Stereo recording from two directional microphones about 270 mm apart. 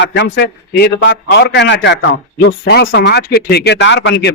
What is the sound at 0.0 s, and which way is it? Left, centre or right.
Speech, left.